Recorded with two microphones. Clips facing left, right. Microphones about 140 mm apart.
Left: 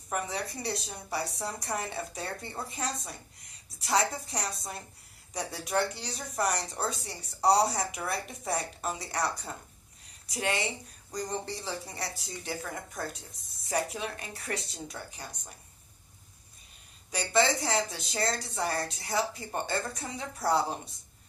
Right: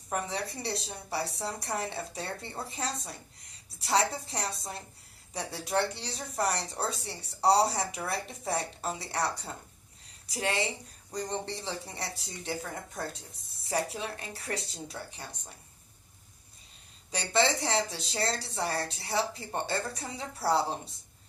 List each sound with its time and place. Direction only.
0.1 s a woman's voice: 30° right (ahead or behind)
17.1 s a woman's voice: 30° right (ahead or behind)